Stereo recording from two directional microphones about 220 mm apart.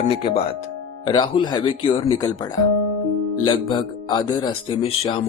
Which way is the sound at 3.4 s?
20° left (ahead or behind).